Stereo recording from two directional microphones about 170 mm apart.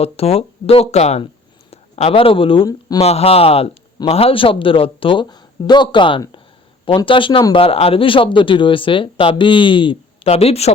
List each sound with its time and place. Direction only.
0.0 s a man's voice: 35° left (ahead or behind)
3.0 s a man's voice: 40° left (ahead or behind)